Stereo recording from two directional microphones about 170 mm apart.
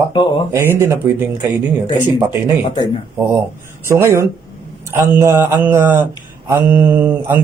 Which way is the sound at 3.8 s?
15° right (ahead or behind).